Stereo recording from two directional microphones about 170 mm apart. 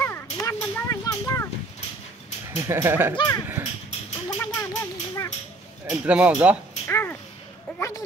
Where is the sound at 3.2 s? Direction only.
20° left (ahead or behind).